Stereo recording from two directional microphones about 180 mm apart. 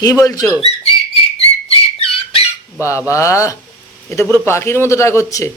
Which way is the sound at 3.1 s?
15° left (ahead or behind).